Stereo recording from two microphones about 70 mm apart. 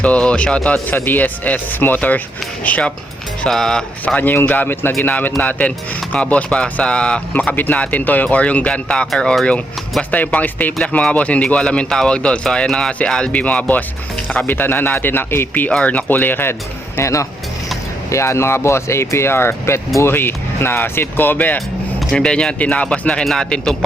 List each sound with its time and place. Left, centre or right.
0.0 s speech: centre
0.9 s speech: left
3.4 s speech: centre
4.0 s speech: left
5.0 s speech: left
7.5 s speech: left
14.5 s speech: left
17.0 s speech: left
22.1 s speech: centre